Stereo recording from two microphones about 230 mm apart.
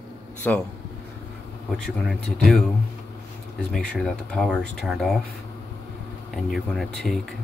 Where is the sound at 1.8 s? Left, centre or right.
Centre.